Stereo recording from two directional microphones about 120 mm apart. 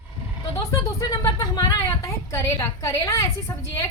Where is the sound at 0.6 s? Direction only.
30° left (ahead or behind).